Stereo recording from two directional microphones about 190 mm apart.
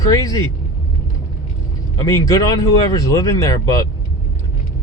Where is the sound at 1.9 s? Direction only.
20° left (ahead or behind).